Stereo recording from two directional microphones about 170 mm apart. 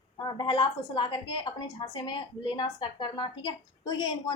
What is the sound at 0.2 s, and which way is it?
Speech, 30° left (ahead or behind).